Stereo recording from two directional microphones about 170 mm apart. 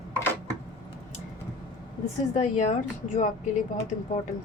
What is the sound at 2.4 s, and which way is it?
Speech, 45° left (ahead or behind).